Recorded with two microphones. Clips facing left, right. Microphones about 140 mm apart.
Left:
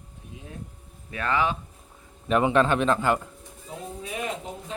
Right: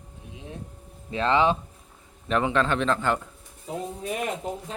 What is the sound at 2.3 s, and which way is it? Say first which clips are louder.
Speech: left 3 dB; 15° left (ahead or behind).